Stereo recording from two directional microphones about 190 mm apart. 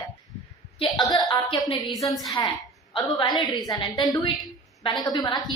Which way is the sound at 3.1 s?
25° left (ahead or behind).